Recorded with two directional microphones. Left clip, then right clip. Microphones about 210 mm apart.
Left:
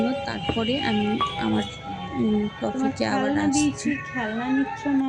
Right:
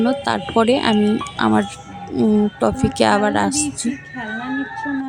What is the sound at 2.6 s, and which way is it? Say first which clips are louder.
Speech: right 8 dB; 40° right (ahead or behind).